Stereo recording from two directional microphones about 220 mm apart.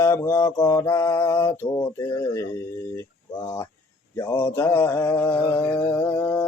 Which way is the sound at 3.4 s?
10° left (ahead or behind).